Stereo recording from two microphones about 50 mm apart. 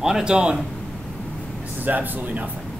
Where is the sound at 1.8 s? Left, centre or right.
Right.